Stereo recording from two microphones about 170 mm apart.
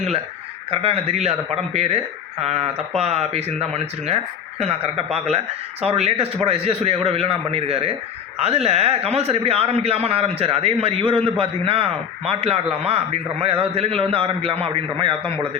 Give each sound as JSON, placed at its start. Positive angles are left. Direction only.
{"t": 0.7, "sound": "a man's voice", "side_deg": -35}